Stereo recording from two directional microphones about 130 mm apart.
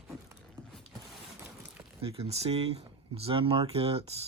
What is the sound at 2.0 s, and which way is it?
Speech, 50° right (ahead or behind).